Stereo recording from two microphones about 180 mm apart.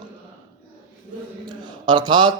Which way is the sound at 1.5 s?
25° right (ahead or behind).